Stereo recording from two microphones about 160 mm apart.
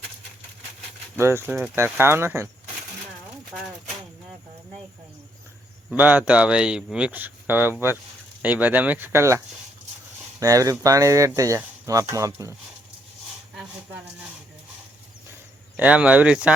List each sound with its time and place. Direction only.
1.2 s speech: 15° right (ahead or behind)
5.9 s speech: 10° right (ahead or behind)
10.4 s speech: 20° right (ahead or behind)
15.8 s speech: 10° right (ahead or behind)